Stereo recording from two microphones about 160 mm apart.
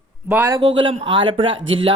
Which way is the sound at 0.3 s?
15° right (ahead or behind).